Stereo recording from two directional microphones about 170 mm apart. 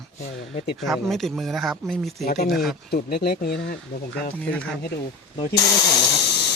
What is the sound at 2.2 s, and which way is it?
Speech, 65° left (ahead or behind).